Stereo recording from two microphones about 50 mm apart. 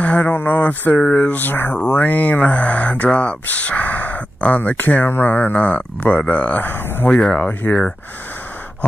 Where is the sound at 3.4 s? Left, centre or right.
Left.